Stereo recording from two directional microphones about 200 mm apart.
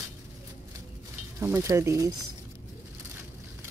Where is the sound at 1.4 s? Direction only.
15° right (ahead or behind).